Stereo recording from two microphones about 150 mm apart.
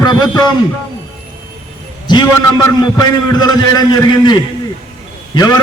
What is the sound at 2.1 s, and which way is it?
A man's voice, 30° left (ahead or behind).